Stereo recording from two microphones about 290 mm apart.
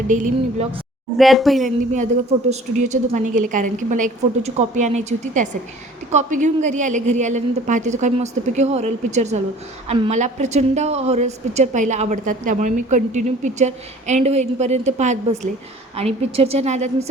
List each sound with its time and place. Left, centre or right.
0.1 s a woman's voice: right
1.2 s speech: centre
2.5 s a woman's voice: right